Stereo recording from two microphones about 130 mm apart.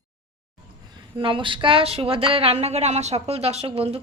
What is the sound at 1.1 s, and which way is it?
Speech, 40° right (ahead or behind).